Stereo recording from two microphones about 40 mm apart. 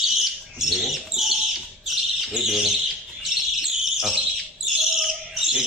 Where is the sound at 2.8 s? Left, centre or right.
Centre.